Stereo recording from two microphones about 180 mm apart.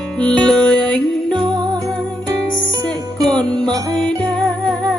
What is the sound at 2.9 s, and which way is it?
Music, 20° right (ahead or behind).